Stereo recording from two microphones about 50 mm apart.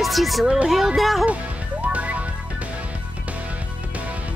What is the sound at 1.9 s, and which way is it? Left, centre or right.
Music, right.